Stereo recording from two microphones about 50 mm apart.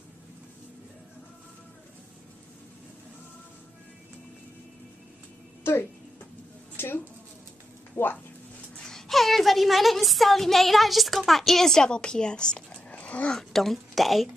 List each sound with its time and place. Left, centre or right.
5.6 s music: left
6.8 s a sound: left
7.9 s speech: left
8.8 s a woman's voice: centre; by 13.3 s left
13.3 s speech: centre